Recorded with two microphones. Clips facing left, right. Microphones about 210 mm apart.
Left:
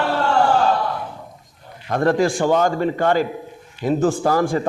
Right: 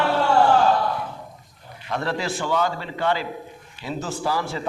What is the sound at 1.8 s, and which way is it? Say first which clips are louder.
A man's voice: left 9 dB; 50° left (ahead or behind).